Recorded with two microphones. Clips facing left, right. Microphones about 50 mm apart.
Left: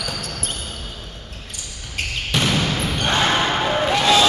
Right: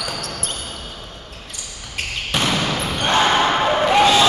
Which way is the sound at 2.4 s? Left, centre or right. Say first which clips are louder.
Even; centre.